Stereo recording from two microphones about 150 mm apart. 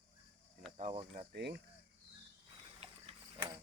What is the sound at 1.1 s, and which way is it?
Speech, 75° right (ahead or behind).